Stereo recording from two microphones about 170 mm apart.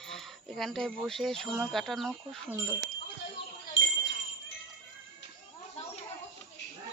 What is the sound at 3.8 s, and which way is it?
Jingle bell, 90° left.